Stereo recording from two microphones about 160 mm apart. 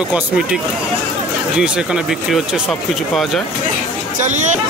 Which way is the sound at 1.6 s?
5° right (ahead or behind).